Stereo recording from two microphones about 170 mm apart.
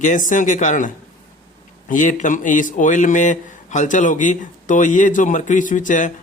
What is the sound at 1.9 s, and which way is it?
Speech, 50° left (ahead or behind).